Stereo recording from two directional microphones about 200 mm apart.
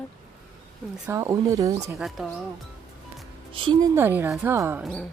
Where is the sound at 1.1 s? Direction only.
15° right (ahead or behind).